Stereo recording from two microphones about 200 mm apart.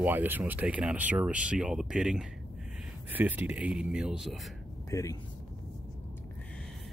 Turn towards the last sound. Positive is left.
turn(degrees=15)  # may be behind; listen again after turning